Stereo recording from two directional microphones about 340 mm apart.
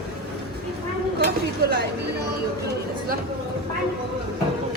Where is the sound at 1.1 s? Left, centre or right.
Right.